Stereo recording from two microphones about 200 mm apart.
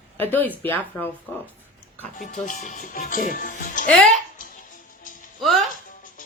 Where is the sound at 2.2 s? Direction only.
40° left (ahead or behind).